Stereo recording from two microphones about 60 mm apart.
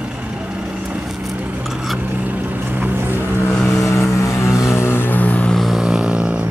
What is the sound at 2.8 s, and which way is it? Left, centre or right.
Vehicle, right.